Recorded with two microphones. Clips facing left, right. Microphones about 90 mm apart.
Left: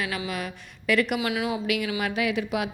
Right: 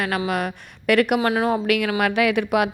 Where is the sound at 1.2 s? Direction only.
45° right (ahead or behind); by 2.7 s 65° right (ahead or behind).